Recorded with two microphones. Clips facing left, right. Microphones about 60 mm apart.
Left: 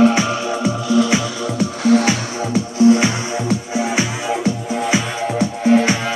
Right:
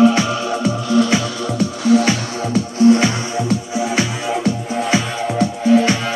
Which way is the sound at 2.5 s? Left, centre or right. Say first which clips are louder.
Even; centre.